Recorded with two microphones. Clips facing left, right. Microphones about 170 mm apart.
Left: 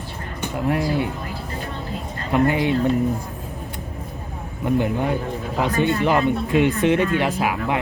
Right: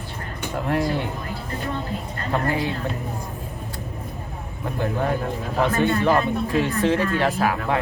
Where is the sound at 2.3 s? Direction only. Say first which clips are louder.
Left 5 dB; 20° left (ahead or behind).